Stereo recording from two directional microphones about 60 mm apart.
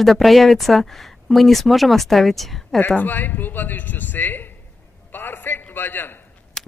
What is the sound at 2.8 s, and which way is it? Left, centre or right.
A man's voice, left.